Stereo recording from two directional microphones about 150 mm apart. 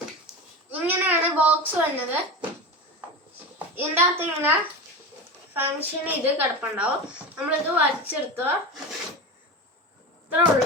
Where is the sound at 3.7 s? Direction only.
15° right (ahead or behind).